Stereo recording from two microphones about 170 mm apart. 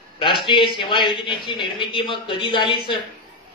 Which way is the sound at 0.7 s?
30° left (ahead or behind).